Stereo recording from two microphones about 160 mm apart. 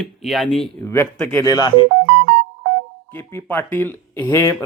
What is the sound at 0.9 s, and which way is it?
Speech, 15° left (ahead or behind).